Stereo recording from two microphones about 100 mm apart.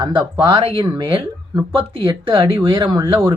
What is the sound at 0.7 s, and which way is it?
Speech, 40° right (ahead or behind).